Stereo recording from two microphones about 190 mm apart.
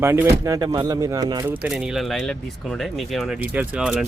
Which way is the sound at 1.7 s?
5° right (ahead or behind).